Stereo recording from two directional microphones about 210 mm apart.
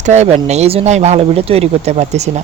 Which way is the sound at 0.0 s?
35° right (ahead or behind).